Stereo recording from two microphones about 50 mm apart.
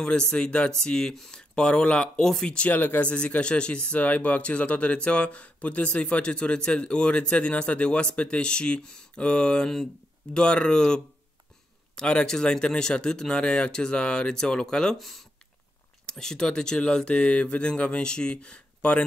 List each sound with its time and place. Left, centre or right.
0.0 s speech: centre
4.0 s speech: left; by 15.0 s centre
15.0 s speech: centre
16.1 s speech: centre